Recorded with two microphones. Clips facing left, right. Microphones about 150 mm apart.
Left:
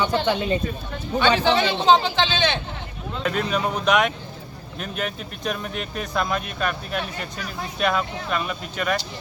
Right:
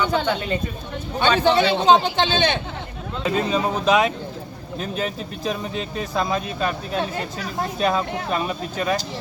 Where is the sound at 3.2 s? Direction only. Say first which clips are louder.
Right 2 dB; 25° right (ahead or behind).